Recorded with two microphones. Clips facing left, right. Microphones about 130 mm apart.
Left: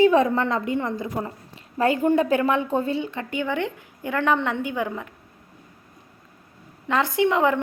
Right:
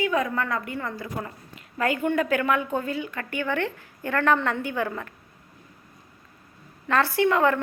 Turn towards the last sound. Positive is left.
turn(degrees=15)  # may be behind; listen again after turning